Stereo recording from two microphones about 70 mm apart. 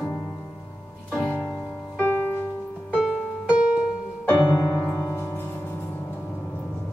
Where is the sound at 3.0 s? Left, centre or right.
Centre.